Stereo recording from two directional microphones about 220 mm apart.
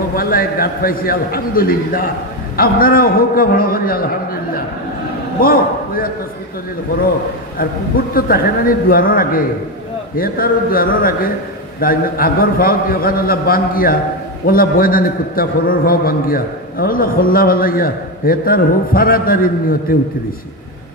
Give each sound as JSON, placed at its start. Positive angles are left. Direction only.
{"t": 0.1, "sound": "a man's voice", "side_deg": 40}
{"t": 5.4, "sound": "a man's voice", "side_deg": 40}
{"t": 8.1, "sound": "a man's voice", "side_deg": 40}